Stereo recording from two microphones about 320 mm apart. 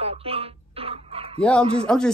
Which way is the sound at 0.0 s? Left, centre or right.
Centre.